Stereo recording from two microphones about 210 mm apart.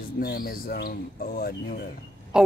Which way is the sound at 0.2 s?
45° left (ahead or behind).